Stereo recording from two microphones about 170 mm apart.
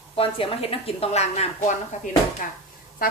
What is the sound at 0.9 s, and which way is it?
Speech, 35° left (ahead or behind).